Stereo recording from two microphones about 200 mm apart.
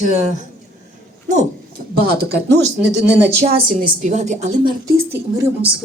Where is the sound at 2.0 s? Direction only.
50° right (ahead or behind).